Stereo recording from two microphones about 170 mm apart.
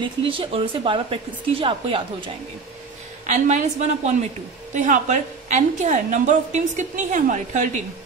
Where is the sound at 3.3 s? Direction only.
45° right (ahead or behind).